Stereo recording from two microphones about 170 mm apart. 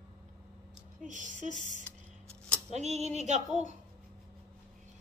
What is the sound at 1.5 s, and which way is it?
Speech, 45° left (ahead or behind).